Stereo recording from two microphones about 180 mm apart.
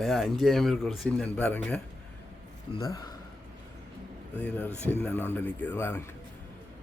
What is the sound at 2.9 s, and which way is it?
Speech, 20° left (ahead or behind).